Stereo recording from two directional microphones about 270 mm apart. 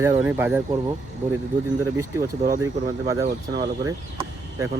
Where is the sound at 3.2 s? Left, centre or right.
Right.